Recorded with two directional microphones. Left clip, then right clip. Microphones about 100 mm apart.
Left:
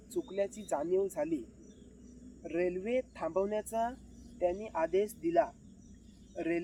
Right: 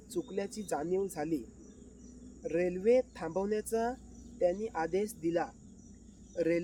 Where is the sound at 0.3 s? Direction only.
50° right (ahead or behind).